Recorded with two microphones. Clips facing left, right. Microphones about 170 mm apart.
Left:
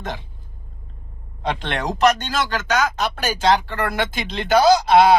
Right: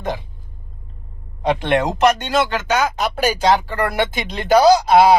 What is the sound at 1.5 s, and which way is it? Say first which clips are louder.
Speech: right 6 dB; 15° right (ahead or behind).